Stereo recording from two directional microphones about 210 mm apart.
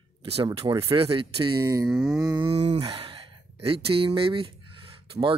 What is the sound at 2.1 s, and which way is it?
Speech, 20° right (ahead or behind).